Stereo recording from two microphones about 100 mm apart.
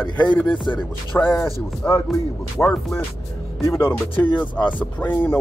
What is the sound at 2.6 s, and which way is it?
Speech, 20° left (ahead or behind).